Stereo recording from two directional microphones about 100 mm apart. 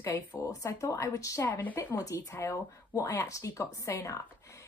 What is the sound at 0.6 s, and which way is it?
Speech, 25° left (ahead or behind).